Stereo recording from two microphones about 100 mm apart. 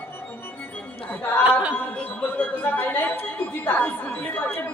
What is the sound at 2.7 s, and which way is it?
Music, 20° left (ahead or behind).